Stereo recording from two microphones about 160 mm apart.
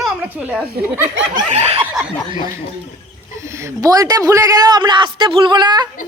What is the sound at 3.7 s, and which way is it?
A man's voice, 20° right (ahead or behind).